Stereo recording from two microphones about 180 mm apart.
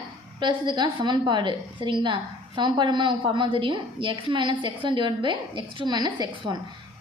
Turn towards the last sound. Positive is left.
turn(degrees=-25)  # may be behind; listen again after turning